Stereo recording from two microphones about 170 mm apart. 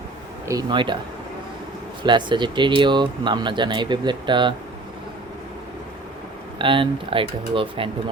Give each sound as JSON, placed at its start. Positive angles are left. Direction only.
{"t": 0.4, "sound": "speech", "side_deg": -25}
{"t": 2.0, "sound": "speech", "side_deg": -25}
{"t": 6.6, "sound": "speech", "side_deg": -30}